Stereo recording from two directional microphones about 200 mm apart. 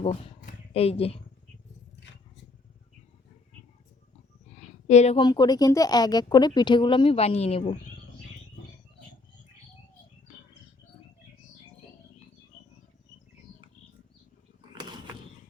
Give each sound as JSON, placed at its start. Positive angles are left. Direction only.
{"t": 0.4, "sound": "speech", "side_deg": 30}
{"t": 4.5, "sound": "a woman's voice", "side_deg": 35}